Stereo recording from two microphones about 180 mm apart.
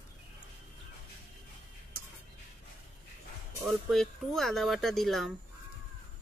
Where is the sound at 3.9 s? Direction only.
Centre (ahead or behind).